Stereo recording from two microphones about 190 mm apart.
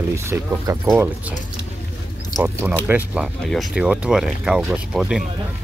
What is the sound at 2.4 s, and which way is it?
Speech, 10° right (ahead or behind).